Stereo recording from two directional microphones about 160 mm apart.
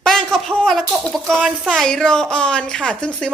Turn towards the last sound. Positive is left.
turn(degrees=5)  # may be behind; listen again after turning